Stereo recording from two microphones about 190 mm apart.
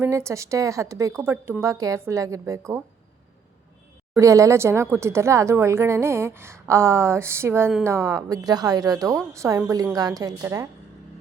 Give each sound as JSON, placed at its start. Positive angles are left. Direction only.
{"t": 0.0, "sound": "speech", "side_deg": -15}
{"t": 4.2, "sound": "speech", "side_deg": -15}